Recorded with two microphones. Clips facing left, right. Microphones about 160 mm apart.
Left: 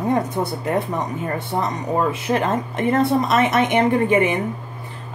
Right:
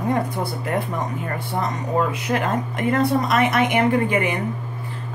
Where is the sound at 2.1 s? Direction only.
25° left (ahead or behind).